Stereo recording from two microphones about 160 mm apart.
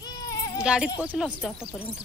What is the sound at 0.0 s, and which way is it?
Sheep, 20° left (ahead or behind).